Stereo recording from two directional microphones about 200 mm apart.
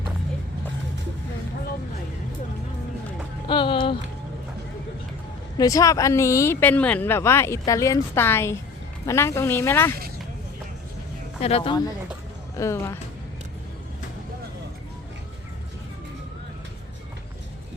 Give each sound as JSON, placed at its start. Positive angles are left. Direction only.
{"t": 3.4, "sound": "a sound", "side_deg": 25}
{"t": 5.5, "sound": "speech", "side_deg": 15}
{"t": 11.3, "sound": "speech", "side_deg": 30}
{"t": 12.5, "sound": "speech", "side_deg": 15}